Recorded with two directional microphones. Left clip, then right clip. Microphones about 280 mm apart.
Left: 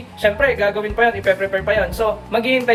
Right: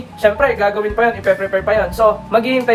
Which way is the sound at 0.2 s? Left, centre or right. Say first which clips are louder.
Right 3 dB; centre.